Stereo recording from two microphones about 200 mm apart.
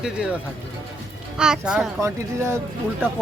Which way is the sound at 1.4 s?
5° right (ahead or behind).